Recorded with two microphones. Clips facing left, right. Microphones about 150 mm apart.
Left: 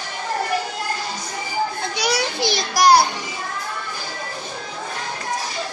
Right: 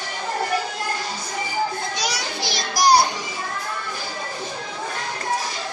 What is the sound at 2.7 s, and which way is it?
Music, 60° left (ahead or behind).